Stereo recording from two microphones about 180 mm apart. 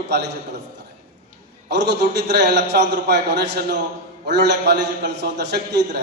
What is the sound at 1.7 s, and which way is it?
A man's voice, 70° right (ahead or behind).